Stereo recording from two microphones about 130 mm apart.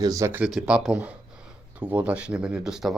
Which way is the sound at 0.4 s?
5° right (ahead or behind).